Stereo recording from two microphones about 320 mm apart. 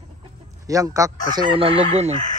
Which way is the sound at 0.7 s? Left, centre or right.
Centre.